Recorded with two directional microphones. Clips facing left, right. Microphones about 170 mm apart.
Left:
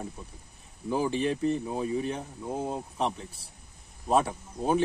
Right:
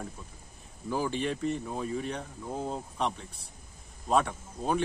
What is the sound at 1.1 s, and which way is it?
Speech, centre (ahead or behind).